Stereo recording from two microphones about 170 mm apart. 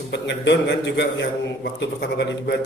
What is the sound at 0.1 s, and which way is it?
A man's voice, 90° left.